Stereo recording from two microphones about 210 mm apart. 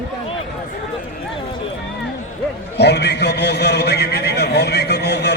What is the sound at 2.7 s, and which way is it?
A man's voice, 55° left (ahead or behind).